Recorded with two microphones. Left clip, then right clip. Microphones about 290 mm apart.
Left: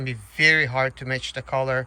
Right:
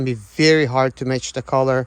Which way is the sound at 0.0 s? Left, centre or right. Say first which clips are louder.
Right 2 dB; centre.